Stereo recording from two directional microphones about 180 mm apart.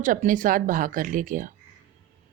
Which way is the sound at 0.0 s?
45° right (ahead or behind).